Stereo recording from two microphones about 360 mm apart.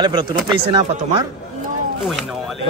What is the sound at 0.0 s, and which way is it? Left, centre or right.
Speech, centre.